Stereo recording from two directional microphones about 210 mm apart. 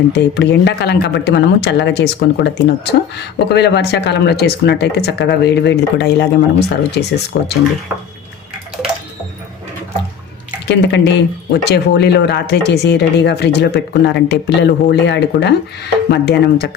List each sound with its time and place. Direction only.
0.1 s speech: 55° left (ahead or behind)
10.7 s speech: 55° left (ahead or behind)